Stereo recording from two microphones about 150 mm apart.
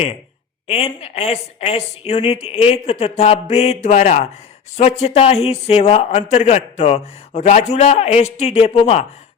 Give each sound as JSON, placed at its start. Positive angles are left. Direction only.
{"t": 0.7, "sound": "a man's voice", "side_deg": 40}